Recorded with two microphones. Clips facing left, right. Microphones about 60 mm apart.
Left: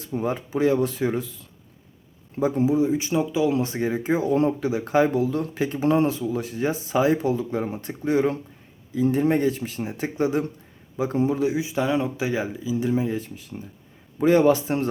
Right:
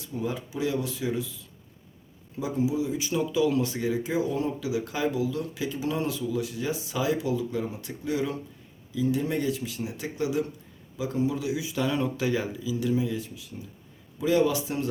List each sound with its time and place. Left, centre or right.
0.0 s speech: left
2.3 s speech: left